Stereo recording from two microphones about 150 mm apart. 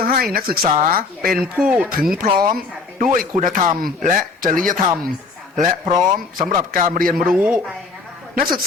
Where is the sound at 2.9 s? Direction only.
60° right (ahead or behind).